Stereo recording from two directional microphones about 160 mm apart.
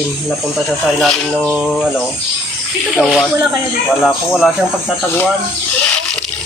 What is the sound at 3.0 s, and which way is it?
Speech, centre (ahead or behind).